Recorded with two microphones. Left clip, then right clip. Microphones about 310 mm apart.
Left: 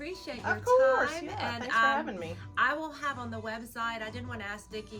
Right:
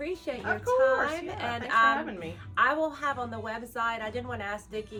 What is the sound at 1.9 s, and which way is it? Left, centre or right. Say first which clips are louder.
Speech: even; centre.